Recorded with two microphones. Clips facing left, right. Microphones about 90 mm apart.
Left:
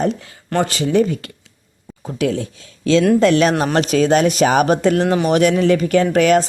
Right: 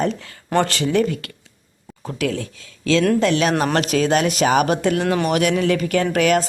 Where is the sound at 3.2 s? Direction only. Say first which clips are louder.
Left 5 dB; 45° left (ahead or behind).